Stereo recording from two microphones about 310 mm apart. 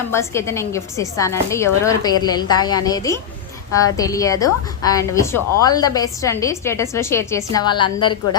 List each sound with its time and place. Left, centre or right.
0.1 s a woman's voice: centre